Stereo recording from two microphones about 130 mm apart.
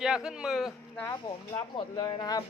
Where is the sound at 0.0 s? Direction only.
5° right (ahead or behind).